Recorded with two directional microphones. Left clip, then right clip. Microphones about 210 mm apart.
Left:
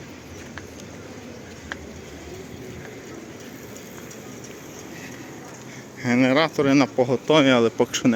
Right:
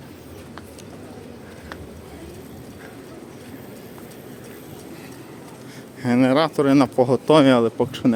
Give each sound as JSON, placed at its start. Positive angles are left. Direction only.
{"t": 6.0, "sound": "a man's voice", "side_deg": -15}
{"t": 7.6, "sound": "a man's voice", "side_deg": -10}